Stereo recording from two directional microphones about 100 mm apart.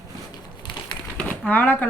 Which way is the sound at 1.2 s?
15° left (ahead or behind).